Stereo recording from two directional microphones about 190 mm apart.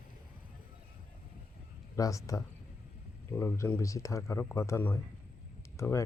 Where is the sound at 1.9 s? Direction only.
15° left (ahead or behind).